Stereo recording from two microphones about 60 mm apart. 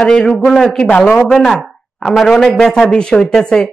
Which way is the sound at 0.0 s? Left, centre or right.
Centre.